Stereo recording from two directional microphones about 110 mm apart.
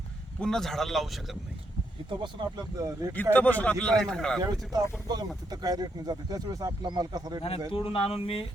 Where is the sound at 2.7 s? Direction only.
30° right (ahead or behind).